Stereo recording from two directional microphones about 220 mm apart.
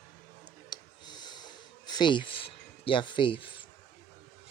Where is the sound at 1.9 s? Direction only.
20° left (ahead or behind).